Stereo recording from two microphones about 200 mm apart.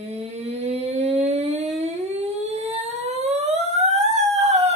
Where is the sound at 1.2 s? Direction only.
30° right (ahead or behind).